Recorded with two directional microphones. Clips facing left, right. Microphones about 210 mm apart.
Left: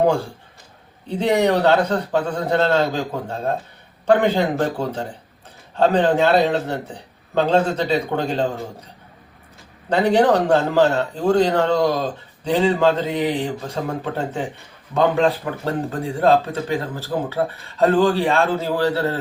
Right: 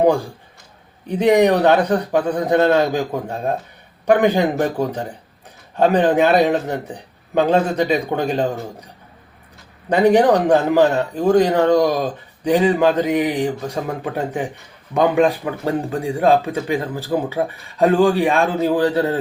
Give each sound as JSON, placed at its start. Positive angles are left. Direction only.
{"t": 0.0, "sound": "speech", "side_deg": -15}
{"t": 9.9, "sound": "speech", "side_deg": -15}